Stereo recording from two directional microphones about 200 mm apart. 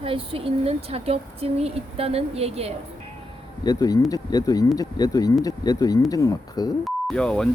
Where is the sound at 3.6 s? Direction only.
20° left (ahead or behind).